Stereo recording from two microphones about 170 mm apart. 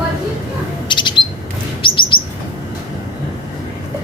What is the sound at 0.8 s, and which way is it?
Bird, 25° left (ahead or behind).